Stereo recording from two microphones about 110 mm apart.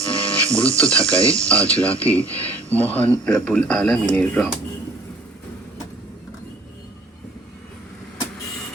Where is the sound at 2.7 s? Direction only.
15° left (ahead or behind).